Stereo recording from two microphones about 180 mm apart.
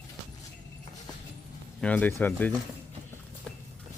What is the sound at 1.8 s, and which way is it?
Speech, 10° left (ahead or behind).